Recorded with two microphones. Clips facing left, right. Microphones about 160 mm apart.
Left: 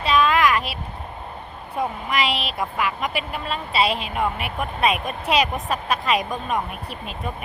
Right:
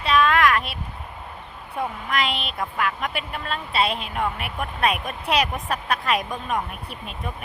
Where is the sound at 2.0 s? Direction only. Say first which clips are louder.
Left 2 dB; centre (ahead or behind).